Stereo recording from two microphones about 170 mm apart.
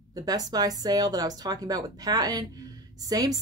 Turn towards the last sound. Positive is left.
turn(degrees=-20)  # may be behind; listen again after turning